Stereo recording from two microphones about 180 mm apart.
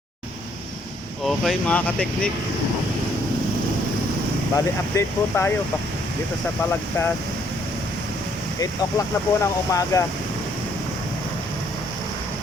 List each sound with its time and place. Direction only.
1.2 s speech: centre (ahead or behind)
4.5 s speech: 15° left (ahead or behind)
8.6 s speech: 20° left (ahead or behind)